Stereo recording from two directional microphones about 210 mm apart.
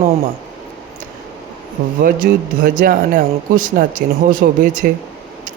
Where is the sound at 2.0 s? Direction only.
40° right (ahead or behind).